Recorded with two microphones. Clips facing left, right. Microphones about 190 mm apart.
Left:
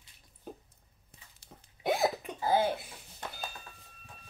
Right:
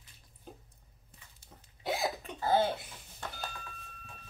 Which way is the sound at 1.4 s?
55° left (ahead or behind).